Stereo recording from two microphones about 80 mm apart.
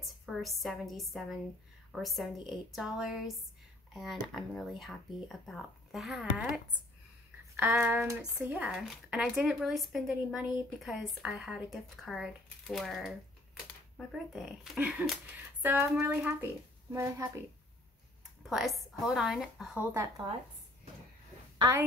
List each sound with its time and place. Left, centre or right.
0.0 s a woman's voice: centre
7.8 s speech: right
9.6 s a woman's voice: centre
14.1 s a woman's voice: centre
15.0 s speech: right
16.9 s speech: right
18.5 s a woman's voice: centre
19.9 s speech: right